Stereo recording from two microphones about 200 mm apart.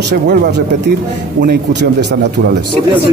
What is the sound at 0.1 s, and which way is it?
Speech, 55° right (ahead or behind).